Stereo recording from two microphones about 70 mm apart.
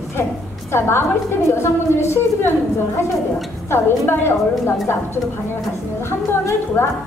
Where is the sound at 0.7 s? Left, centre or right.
Left.